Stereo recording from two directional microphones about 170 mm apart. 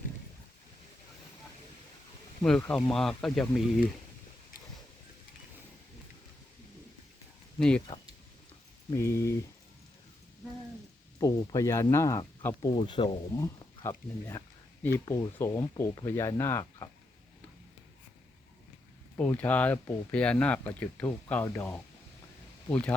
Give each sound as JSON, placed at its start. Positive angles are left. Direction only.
{"t": 2.4, "sound": "speech", "side_deg": 10}
{"t": 7.9, "sound": "speech", "side_deg": 20}
{"t": 11.2, "sound": "speech", "side_deg": 20}
{"t": 12.7, "sound": "speech", "side_deg": 30}
{"t": 13.4, "sound": "speech", "side_deg": 20}
{"t": 19.1, "sound": "speech", "side_deg": 10}